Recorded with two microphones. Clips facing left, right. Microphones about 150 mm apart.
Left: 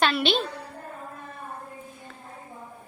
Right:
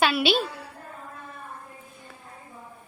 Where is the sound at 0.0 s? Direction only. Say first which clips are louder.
Right 1 dB; 5° right (ahead or behind).